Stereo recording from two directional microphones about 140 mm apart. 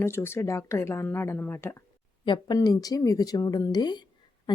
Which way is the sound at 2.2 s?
30° left (ahead or behind).